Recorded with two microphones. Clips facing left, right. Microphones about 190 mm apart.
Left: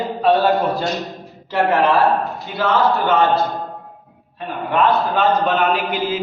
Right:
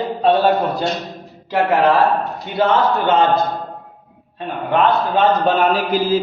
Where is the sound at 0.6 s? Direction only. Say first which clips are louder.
Even; 15° right (ahead or behind).